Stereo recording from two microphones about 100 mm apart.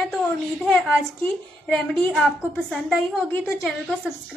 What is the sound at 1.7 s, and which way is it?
Speech, 20° left (ahead or behind).